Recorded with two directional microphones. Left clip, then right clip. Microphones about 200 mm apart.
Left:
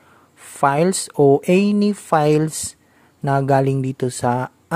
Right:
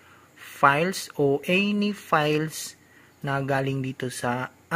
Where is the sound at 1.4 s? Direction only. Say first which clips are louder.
Left 7 dB; 55° left (ahead or behind).